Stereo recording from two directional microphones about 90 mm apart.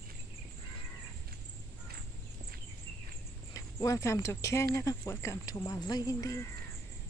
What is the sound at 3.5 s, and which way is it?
Speech, 40° left (ahead or behind).